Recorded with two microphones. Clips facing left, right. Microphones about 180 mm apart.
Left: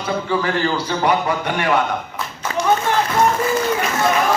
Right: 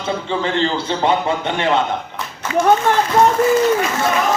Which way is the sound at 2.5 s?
40° left (ahead or behind).